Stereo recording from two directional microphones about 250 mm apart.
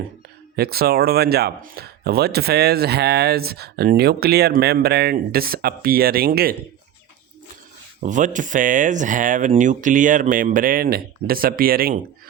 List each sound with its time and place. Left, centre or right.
0.5 s speech: right
8.0 s speech: right